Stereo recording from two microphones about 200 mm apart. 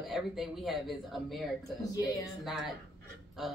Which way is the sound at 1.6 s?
15° left (ahead or behind).